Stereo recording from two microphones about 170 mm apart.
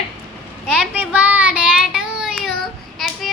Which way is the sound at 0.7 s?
5° right (ahead or behind).